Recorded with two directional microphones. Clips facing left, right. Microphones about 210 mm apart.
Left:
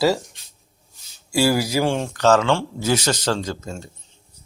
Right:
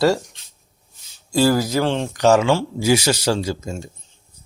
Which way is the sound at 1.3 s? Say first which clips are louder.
Right 2 dB; 10° left (ahead or behind).